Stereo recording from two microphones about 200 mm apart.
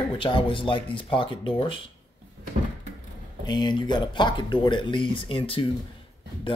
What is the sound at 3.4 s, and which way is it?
Speech, 20° left (ahead or behind).